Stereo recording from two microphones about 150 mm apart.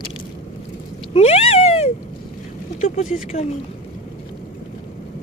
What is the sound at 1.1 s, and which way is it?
Cat, 45° left (ahead or behind).